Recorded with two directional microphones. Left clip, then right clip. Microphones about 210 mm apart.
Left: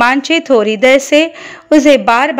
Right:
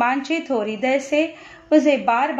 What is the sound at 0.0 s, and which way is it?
A woman's voice, 45° left (ahead or behind).